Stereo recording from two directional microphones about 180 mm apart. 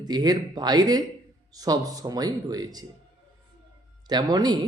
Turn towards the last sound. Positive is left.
turn(degrees=-20)  # may be behind; listen again after turning